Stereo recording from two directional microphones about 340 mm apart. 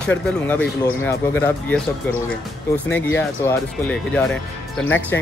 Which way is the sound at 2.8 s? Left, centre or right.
Centre.